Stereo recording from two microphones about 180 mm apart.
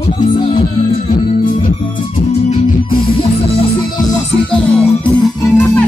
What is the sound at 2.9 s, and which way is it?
Music, 30° left (ahead or behind).